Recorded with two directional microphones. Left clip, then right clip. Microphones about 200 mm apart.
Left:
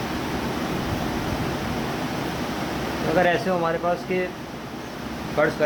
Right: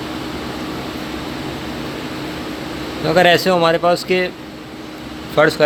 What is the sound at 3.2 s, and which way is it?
Speech, 55° right (ahead or behind).